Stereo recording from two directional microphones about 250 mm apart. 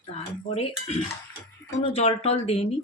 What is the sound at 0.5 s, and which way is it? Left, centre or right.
Speech, left.